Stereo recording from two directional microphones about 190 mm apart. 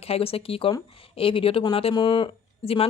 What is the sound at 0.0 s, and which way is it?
Speech, 30° left (ahead or behind).